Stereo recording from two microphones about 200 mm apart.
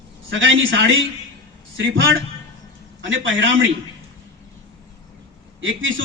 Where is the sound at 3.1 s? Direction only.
75° right (ahead or behind).